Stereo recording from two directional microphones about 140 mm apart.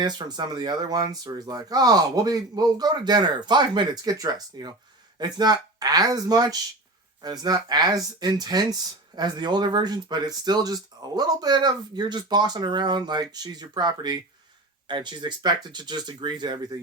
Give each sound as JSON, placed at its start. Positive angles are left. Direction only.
{"t": 0.0, "sound": "speech", "side_deg": -30}